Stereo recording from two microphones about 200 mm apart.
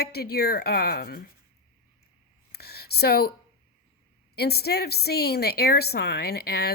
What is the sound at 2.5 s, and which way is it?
Speech, 55° left (ahead or behind).